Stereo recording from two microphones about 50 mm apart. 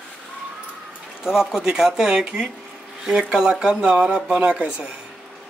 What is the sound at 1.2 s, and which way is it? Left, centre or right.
Speech, centre.